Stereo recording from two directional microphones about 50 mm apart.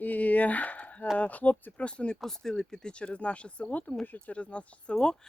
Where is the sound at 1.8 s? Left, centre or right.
Left.